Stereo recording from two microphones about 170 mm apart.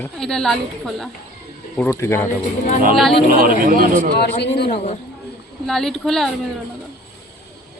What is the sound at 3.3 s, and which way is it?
Speech, 55° right (ahead or behind).